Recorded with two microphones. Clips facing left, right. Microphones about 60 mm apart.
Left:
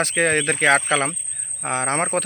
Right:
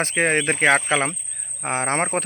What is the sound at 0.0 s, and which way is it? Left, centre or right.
Speech, right.